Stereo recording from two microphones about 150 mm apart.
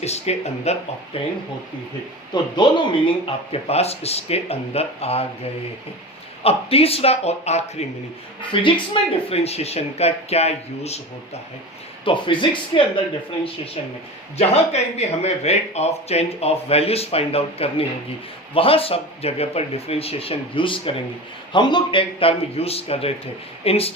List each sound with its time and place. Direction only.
0.0 s speech: 45° left (ahead or behind)
2.3 s speech: 30° left (ahead or behind)
3.2 s speech: 40° left (ahead or behind)
6.4 s speech: 40° left (ahead or behind)
8.4 s speech: 35° left (ahead or behind)
12.0 s speech: 35° left (ahead or behind)
14.3 s speech: 45° left (ahead or behind)